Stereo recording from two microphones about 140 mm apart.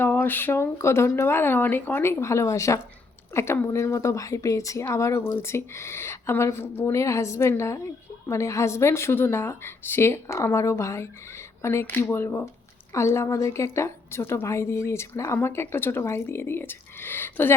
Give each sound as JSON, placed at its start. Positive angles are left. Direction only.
{"t": 0.0, "sound": "a woman's voice", "side_deg": 15}